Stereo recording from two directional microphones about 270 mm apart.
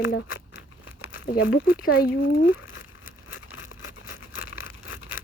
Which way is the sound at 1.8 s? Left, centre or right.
Left.